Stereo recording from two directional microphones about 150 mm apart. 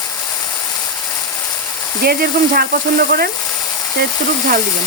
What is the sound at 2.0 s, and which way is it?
Speech, 90° right.